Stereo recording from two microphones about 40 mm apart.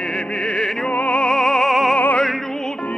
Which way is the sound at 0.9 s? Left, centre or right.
Left.